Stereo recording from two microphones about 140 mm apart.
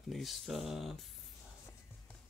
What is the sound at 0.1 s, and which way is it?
Speech, centre (ahead or behind).